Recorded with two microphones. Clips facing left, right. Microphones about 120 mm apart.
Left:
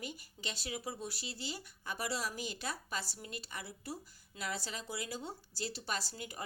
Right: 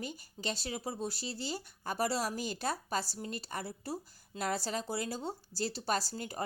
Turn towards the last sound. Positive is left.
turn(degrees=-40)  # may be behind; listen again after turning